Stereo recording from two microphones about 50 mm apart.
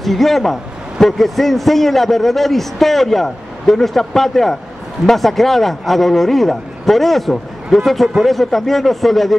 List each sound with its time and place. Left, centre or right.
0.0 s a man's voice: centre